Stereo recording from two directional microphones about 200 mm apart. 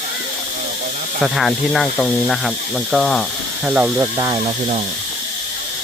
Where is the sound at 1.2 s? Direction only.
Centre (ahead or behind).